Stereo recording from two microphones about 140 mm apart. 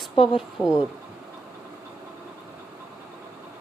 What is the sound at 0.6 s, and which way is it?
Speech, 5° right (ahead or behind).